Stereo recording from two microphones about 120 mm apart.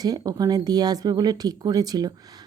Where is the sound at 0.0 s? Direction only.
30° right (ahead or behind).